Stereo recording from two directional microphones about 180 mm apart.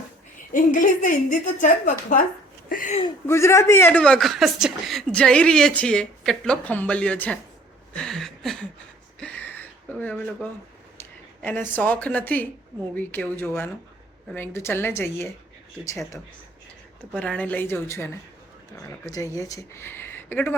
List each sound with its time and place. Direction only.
0.5 s a woman's voice: 45° left (ahead or behind)
2.6 s a sound: 50° left (ahead or behind)
3.2 s speech: 15° left (ahead or behind)
7.9 s a sound: 5° left (ahead or behind)
11.4 s a woman's voice: 10° left (ahead or behind)
17.2 s a woman's voice: 5° left (ahead or behind)